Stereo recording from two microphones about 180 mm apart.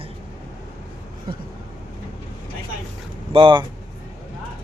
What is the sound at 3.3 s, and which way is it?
Speech, 30° right (ahead or behind).